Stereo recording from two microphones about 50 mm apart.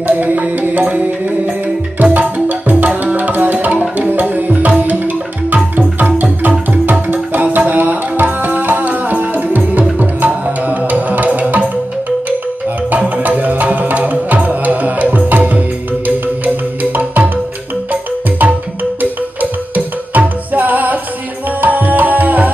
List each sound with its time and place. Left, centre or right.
0.0 s music: right
2.9 s tabla: right
4.0 s music: right
6.9 s tabla: right
13.3 s music: right
19.7 s music: right
21.5 s tabla: right